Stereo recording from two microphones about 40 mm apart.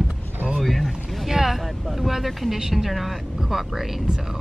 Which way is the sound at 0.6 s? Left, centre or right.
Centre.